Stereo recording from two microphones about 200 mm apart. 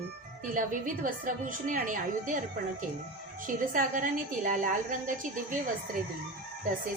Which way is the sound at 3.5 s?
40° right (ahead or behind).